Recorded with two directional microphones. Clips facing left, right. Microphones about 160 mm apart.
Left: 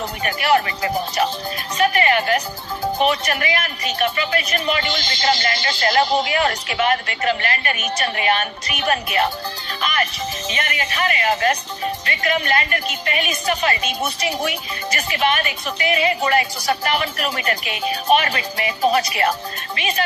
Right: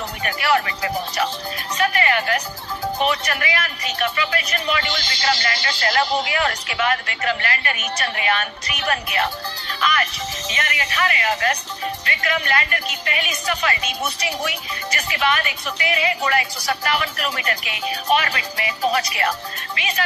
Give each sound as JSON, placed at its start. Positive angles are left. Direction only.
{"t": 0.2, "sound": "speech", "side_deg": 25}
{"t": 1.8, "sound": "music", "side_deg": 20}
{"t": 3.0, "sound": "speech", "side_deg": 20}